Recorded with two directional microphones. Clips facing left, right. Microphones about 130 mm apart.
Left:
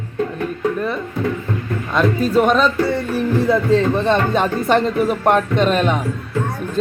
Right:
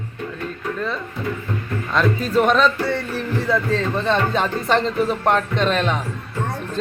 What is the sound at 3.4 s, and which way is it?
A man's voice, 15° left (ahead or behind).